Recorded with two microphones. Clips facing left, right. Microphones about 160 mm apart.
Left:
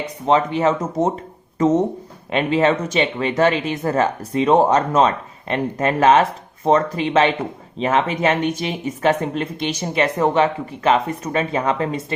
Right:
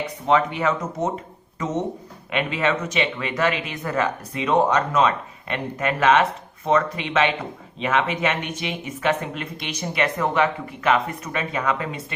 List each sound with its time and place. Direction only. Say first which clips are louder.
0.3 s speech: left 4 dB; 30° left (ahead or behind)
2.3 s speech: left 6 dB; 35° left (ahead or behind)